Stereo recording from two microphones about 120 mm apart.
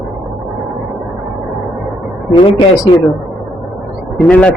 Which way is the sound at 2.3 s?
40° left (ahead or behind).